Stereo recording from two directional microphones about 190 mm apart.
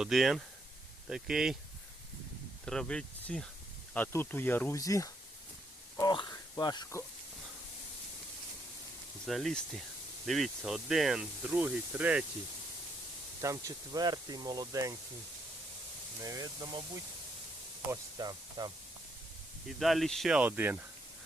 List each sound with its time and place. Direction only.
0.0 s speech: centre (ahead or behind)
2.6 s speech: 5° left (ahead or behind)
6.0 s a sound: 20° left (ahead or behind)
9.2 s speech: centre (ahead or behind)
13.4 s speech: 15° right (ahead or behind)
16.2 s speech: 20° right (ahead or behind)
19.6 s speech: centre (ahead or behind)